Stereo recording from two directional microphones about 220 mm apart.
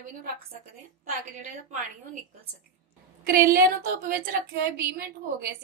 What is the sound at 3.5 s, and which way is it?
A woman's voice, 40° right (ahead or behind).